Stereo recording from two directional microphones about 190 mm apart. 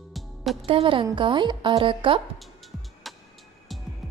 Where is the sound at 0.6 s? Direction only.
25° right (ahead or behind).